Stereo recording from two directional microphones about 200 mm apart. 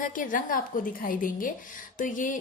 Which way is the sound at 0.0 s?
40° left (ahead or behind).